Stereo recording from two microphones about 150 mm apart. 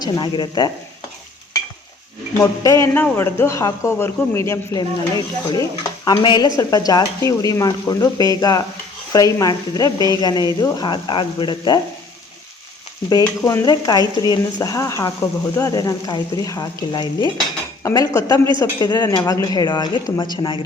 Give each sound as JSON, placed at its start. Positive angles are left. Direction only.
{"t": 0.0, "sound": "a man's voice", "side_deg": 30}
{"t": 2.4, "sound": "a man's voice", "side_deg": 20}
{"t": 13.1, "sound": "a man's voice", "side_deg": 25}